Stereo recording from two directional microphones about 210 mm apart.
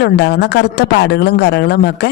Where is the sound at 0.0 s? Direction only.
55° left (ahead or behind).